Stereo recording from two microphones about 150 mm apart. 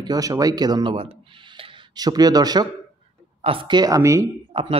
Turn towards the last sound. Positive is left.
turn(degrees=-35)  # may be behind; listen again after turning